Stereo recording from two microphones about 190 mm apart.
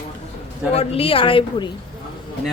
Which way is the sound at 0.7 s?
30° left (ahead or behind).